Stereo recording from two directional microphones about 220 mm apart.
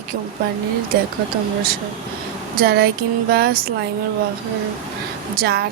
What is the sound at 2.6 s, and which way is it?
A woman's voice, 45° right (ahead or behind).